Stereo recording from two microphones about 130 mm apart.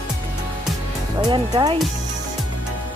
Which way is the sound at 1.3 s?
30° right (ahead or behind).